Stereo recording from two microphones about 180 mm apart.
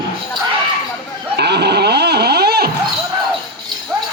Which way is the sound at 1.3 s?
70° right (ahead or behind).